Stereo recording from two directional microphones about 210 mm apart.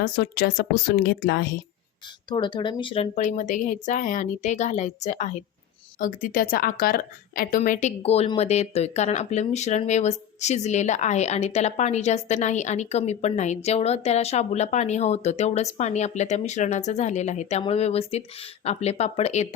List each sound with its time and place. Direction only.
0.0 s speech: 50° left (ahead or behind)
2.3 s a woman's voice: 20° left (ahead or behind)